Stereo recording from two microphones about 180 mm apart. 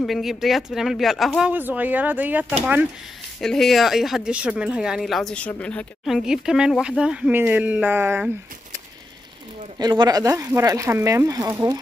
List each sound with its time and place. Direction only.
0.0 s a woman's voice: centre (ahead or behind)
9.8 s speech: 20° right (ahead or behind)